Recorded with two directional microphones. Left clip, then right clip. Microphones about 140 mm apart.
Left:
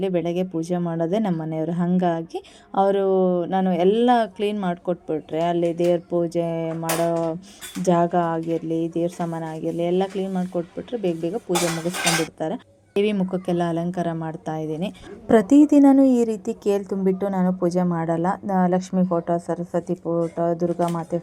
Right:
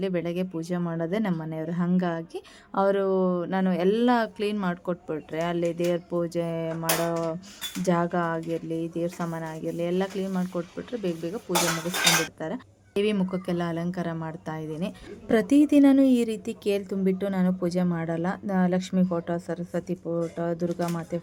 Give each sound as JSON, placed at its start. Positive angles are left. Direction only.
{"t": 0.0, "sound": "a woman's voice", "side_deg": 10}
{"t": 7.9, "sound": "speech", "side_deg": 10}
{"t": 12.4, "sound": "a woman's voice", "side_deg": 10}
{"t": 20.7, "sound": "speech", "side_deg": -20}